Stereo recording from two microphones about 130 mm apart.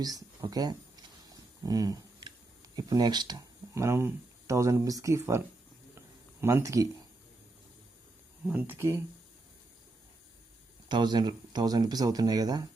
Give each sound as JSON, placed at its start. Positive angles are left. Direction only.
{"t": 0.5, "sound": "a sound", "side_deg": -30}
{"t": 2.7, "sound": "speech", "side_deg": -30}
{"t": 6.4, "sound": "speech", "side_deg": -20}
{"t": 8.4, "sound": "speech", "side_deg": -15}
{"t": 10.8, "sound": "speech", "side_deg": -35}